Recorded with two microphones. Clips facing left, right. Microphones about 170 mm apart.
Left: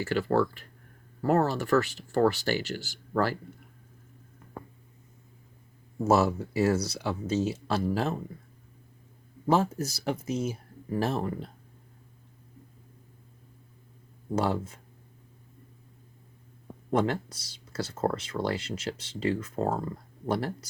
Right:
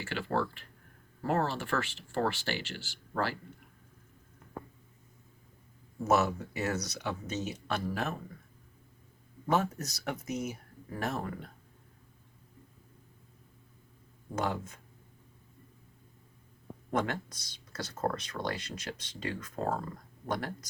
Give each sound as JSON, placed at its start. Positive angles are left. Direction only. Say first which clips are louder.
{"t": 0.0, "sound": "speech", "louder": "left 7 dB", "side_deg": 40}
{"t": 6.1, "sound": "speech", "louder": "left 4 dB", "side_deg": 30}
{"t": 9.5, "sound": "speech", "louder": "left 5 dB", "side_deg": 30}
{"t": 14.3, "sound": "speech", "louder": "left 6 dB", "side_deg": 30}
{"t": 16.9, "sound": "speech", "louder": "left 6 dB", "side_deg": 30}